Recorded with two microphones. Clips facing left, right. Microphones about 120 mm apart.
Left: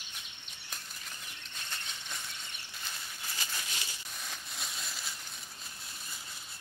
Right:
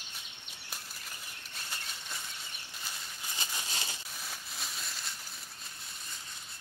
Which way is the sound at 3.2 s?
20° right (ahead or behind).